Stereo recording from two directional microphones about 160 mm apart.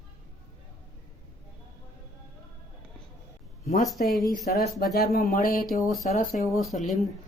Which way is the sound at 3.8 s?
Centre (ahead or behind).